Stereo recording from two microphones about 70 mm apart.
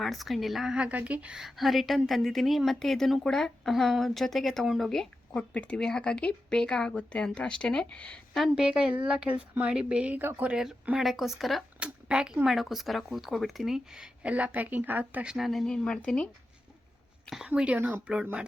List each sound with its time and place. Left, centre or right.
0.0 s a woman's voice: centre
0.7 s a woman's voice: centre
1.4 s a woman's voice: centre
5.5 s speech: centre
8.5 s speech: centre
10.2 s a woman's voice: right
10.5 s a woman's voice: centre
11.8 s speech: centre
12.5 s a woman's voice: centre; by 15.3 s right
15.3 s a woman's voice: centre
15.6 s speech: centre
17.2 s speech: centre
17.5 s a woman's voice: centre
17.7 s speech: right